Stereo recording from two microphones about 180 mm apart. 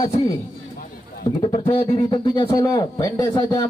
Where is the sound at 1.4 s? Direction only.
30° left (ahead or behind).